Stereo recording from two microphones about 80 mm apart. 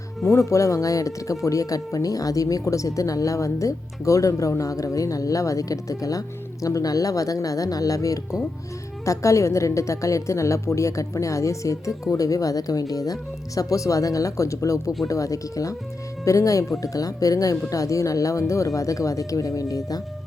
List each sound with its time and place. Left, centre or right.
0.3 s speech: left